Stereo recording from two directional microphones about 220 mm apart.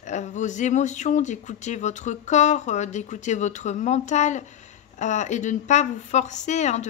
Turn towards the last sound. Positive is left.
turn(degrees=30)  # may be behind; listen again after turning